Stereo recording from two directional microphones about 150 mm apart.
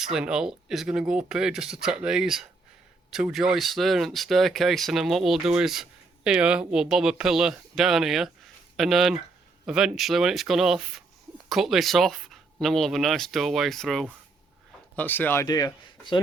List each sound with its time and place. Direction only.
0.0 s speech: 5° right (ahead or behind); by 15.4 s 15° left (ahead or behind)
15.4 s speech: 25° left (ahead or behind)